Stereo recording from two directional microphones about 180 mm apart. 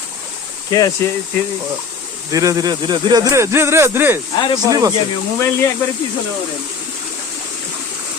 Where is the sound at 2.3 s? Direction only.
20° right (ahead or behind).